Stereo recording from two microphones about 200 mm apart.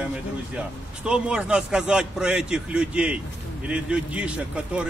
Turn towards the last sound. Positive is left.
turn(degrees=-5)  # may be behind; listen again after turning